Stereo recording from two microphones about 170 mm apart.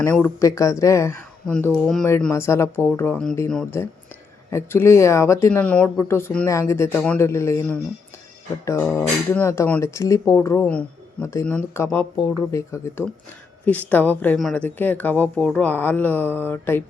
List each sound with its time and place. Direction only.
0.0 s speech: 15° left (ahead or behind)
1.5 s speech: 5° left (ahead or behind)
2.3 s speech: 15° left (ahead or behind)
4.5 s speech: 15° left (ahead or behind)
12.5 s speech: 15° left (ahead or behind)